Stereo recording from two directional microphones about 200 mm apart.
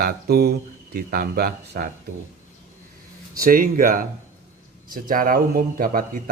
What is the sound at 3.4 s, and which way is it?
Speech, 45° right (ahead or behind).